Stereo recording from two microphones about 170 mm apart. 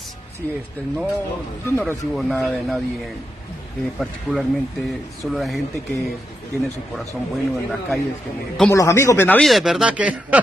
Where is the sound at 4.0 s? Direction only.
5° left (ahead or behind).